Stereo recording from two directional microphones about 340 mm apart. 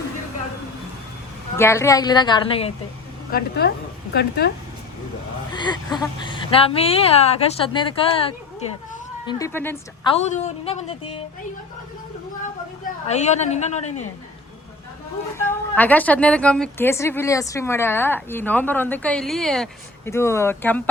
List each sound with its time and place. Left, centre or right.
1.5 s a woman's voice: centre
3.3 s speech: left
5.5 s a woman's voice: centre
9.2 s a woman's voice: centre
13.1 s speech: centre
15.4 s a woman's voice: centre